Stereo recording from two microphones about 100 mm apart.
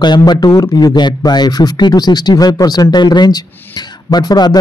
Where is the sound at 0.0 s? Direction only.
45° left (ahead or behind).